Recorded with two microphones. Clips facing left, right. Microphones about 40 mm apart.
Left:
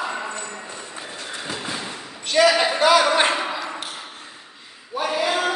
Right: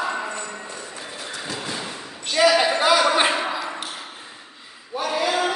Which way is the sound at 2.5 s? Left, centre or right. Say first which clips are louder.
Right 1 dB; centre.